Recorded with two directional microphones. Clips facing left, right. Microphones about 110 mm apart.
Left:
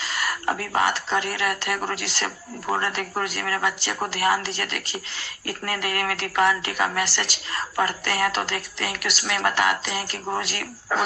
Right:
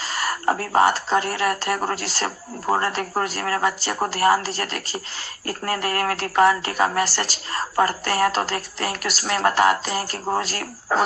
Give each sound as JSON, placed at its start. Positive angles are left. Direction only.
{"t": 0.0, "sound": "a woman's voice", "side_deg": -40}